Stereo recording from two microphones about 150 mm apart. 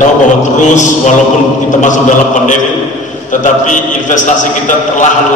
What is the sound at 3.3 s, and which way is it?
A man's voice, 55° left (ahead or behind).